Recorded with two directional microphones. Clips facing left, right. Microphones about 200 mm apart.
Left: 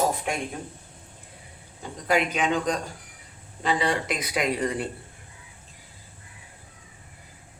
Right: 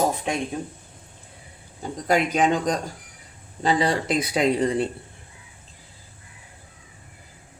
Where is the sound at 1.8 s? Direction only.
40° right (ahead or behind).